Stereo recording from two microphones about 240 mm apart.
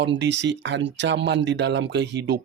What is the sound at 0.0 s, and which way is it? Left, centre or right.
Speech, right.